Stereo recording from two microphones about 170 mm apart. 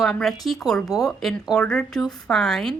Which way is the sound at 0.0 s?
Centre (ahead or behind).